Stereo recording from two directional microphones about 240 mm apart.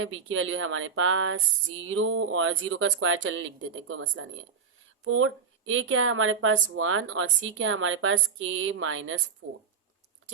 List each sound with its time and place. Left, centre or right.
0.0 s speech: right